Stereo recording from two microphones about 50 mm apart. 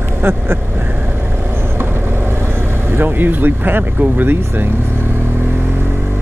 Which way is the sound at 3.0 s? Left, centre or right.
Right.